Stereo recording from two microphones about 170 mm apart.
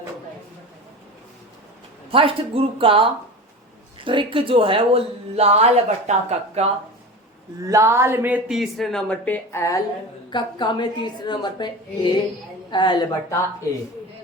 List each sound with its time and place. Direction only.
2.0 s a woman's voice: 30° right (ahead or behind)
7.7 s a woman's voice: 15° right (ahead or behind); by 13.1 s 25° left (ahead or behind)